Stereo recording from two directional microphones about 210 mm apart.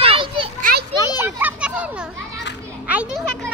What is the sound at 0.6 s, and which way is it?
Children playing, 40° right (ahead or behind).